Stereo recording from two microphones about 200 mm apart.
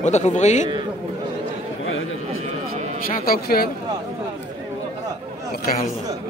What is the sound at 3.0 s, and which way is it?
Speech, 45° left (ahead or behind).